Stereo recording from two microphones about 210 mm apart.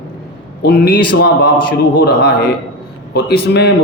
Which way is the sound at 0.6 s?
45° left (ahead or behind).